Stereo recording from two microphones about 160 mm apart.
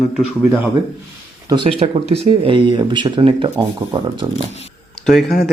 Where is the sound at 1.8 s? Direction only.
40° right (ahead or behind).